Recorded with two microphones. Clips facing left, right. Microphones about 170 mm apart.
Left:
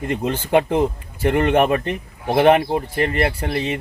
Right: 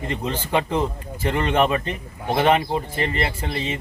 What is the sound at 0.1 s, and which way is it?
Speech, 55° left (ahead or behind).